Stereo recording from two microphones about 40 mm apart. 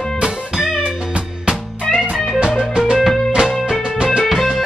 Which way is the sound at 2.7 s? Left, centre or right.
Centre.